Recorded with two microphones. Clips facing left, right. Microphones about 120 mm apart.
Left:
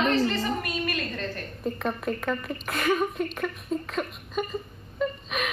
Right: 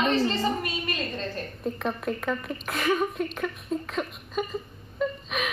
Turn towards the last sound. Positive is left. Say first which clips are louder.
# even
turn(degrees=0)  # may be behind; listen again after turning